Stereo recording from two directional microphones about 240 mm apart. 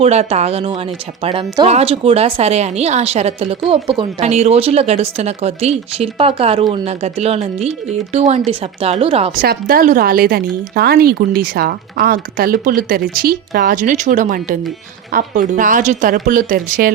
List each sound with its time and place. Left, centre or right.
0.0 s speech: right
9.4 s speech: right